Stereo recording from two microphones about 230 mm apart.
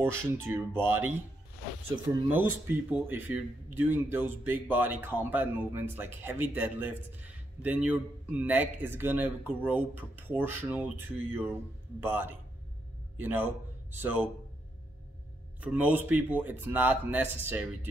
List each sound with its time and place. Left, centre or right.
0.0 s speech: centre
15.6 s speech: centre